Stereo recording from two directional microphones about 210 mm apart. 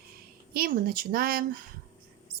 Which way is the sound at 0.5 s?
45° right (ahead or behind).